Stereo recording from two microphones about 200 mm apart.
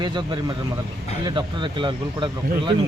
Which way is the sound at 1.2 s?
25° right (ahead or behind).